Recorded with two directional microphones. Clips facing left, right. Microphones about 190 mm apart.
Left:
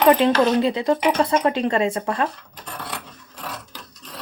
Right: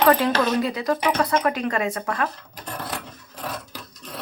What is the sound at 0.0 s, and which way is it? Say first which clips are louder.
Speech: left 3 dB; 20° left (ahead or behind).